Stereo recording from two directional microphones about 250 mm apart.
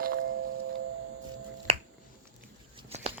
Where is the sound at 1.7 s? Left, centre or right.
Right.